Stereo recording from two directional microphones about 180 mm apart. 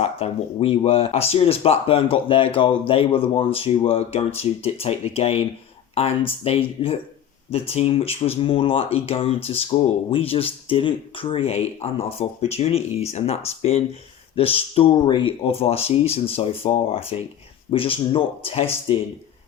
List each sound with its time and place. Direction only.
0.0 s speech: 35° left (ahead or behind)